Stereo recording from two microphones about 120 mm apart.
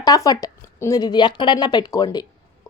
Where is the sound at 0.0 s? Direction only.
30° left (ahead or behind).